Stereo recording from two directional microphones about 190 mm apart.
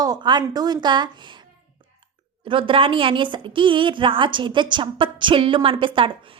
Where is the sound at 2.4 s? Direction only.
25° right (ahead or behind).